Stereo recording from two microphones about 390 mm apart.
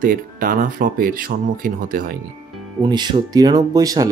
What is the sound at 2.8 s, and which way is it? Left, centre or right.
Speech, centre.